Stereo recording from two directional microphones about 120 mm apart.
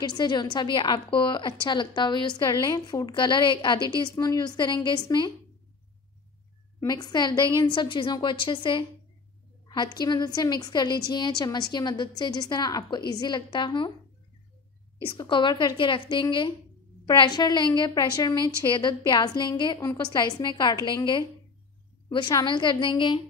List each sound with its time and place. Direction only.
0.1 s a woman's voice: 35° left (ahead or behind)
6.9 s a woman's voice: 35° left (ahead or behind)
15.1 s a woman's voice: 40° left (ahead or behind)